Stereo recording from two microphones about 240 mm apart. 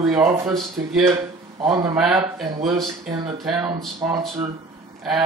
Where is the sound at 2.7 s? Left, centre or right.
Centre.